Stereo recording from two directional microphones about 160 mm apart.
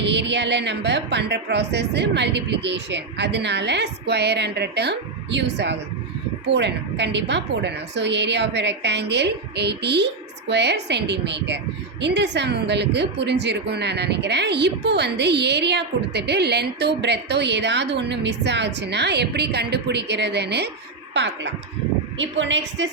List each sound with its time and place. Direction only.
0.0 s a woman's voice: 90° right